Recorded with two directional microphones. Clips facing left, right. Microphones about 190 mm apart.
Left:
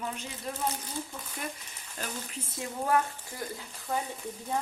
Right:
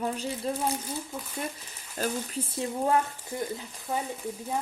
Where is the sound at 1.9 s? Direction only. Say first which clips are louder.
Right 8 dB; 35° right (ahead or behind).